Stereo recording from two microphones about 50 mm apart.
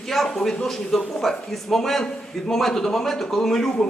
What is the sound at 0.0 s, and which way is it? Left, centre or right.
A man's voice, centre.